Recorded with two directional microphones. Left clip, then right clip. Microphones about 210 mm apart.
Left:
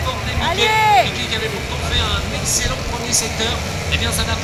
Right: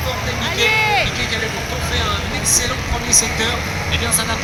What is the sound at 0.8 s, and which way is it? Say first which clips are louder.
Vehicle: left 3 dB; 35° left (ahead or behind).